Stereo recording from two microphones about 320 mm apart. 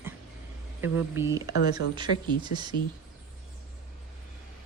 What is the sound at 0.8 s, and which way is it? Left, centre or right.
A woman's voice, centre.